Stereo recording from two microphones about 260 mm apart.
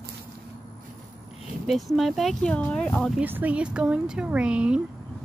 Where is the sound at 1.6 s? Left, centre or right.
Centre.